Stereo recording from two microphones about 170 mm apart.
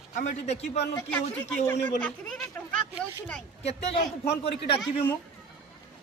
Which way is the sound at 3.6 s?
35° left (ahead or behind).